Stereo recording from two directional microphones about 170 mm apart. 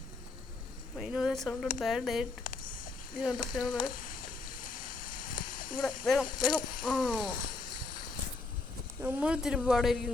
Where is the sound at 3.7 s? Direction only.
25° left (ahead or behind).